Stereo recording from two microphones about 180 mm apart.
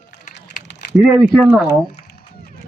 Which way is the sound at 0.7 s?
70° left (ahead or behind).